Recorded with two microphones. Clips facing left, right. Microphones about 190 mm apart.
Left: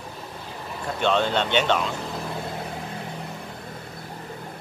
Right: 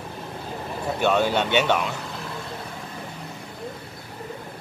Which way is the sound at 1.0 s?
10° right (ahead or behind).